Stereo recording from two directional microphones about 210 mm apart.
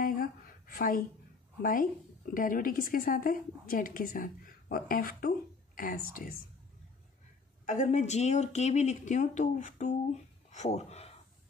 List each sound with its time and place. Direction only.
0.7 s a woman's voice: 40° left (ahead or behind)
7.6 s speech: 35° left (ahead or behind)